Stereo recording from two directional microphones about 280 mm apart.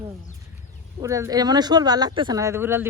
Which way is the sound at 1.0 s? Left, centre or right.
Centre.